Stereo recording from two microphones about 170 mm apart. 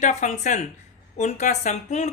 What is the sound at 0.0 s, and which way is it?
Speech, 45° left (ahead or behind).